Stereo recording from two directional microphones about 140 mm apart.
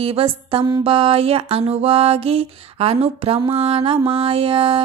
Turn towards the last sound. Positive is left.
turn(degrees=-40)  # may be behind; listen again after turning